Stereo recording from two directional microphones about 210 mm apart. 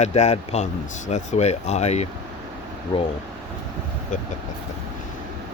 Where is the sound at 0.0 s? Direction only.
30° left (ahead or behind).